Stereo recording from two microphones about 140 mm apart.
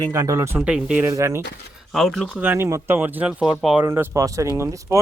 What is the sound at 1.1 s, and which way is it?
Speech, 20° right (ahead or behind).